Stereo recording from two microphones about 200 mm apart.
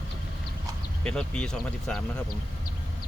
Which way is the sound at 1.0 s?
5° left (ahead or behind).